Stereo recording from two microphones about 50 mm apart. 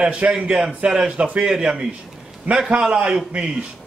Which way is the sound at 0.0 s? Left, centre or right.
Right.